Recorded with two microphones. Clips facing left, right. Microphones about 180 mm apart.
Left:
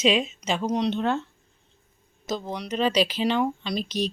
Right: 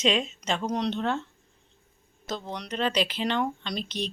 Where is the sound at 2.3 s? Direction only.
10° left (ahead or behind).